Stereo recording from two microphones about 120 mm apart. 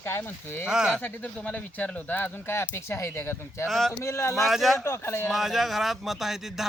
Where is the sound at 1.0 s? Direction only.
15° left (ahead or behind).